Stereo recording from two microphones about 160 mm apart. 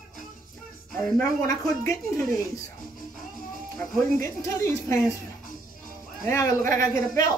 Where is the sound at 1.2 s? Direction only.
20° left (ahead or behind).